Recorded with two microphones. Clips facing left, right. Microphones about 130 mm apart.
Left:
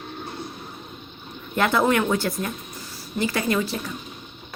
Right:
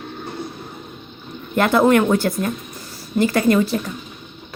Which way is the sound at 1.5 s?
50° right (ahead or behind).